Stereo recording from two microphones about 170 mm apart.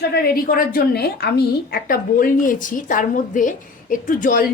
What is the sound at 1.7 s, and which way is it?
A woman's voice, 55° left (ahead or behind).